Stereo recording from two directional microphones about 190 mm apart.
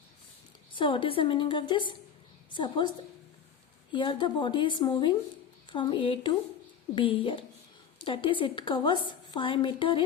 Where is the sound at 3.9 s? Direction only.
25° left (ahead or behind).